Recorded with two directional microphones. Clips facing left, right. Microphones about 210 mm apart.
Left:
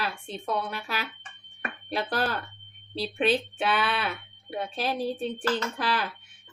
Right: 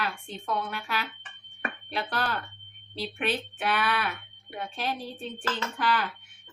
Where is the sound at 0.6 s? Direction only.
40° left (ahead or behind).